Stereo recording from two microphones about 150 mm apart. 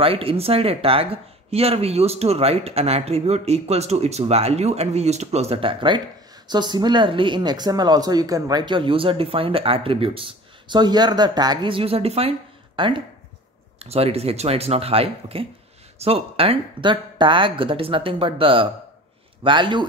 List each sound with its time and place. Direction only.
0.0 s speech: 40° right (ahead or behind)